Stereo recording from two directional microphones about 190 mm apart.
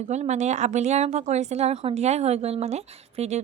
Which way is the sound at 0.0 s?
35° right (ahead or behind).